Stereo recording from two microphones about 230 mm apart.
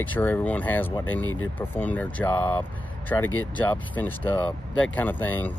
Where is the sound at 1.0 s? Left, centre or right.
Left.